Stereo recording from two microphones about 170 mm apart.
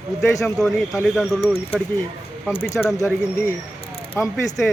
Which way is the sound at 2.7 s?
15° left (ahead or behind).